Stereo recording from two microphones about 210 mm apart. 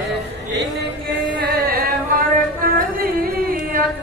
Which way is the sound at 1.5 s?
45° right (ahead or behind).